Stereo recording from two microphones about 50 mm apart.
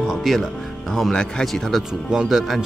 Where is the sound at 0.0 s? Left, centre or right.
Centre.